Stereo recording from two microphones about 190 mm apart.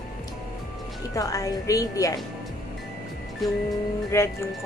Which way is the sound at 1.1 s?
15° left (ahead or behind).